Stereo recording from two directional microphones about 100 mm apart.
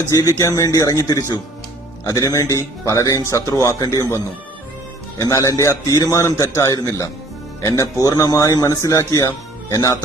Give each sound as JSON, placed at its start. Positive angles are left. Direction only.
{"t": 0.1, "sound": "a man's voice", "side_deg": 30}
{"t": 5.3, "sound": "a man's voice", "side_deg": 35}